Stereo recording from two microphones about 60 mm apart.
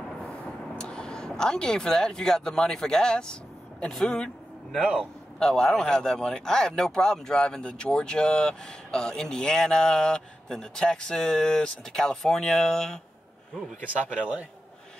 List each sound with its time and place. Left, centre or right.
0.7 s speech: centre
5.4 s speech: centre
14.0 s a man's voice: centre